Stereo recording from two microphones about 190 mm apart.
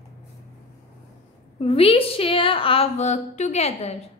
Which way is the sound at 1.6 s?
30° left (ahead or behind).